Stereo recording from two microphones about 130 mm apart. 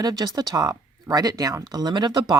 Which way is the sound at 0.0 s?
30° right (ahead or behind).